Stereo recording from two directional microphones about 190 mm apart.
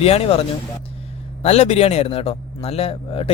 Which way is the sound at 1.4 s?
35° left (ahead or behind).